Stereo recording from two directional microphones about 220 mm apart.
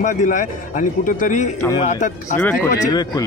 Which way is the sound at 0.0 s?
35° left (ahead or behind).